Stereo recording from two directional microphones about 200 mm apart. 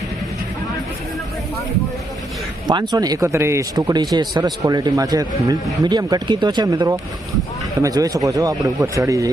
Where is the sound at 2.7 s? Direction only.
20° right (ahead or behind).